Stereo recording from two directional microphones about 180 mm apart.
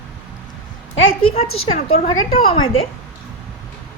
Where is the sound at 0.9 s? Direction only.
90° left.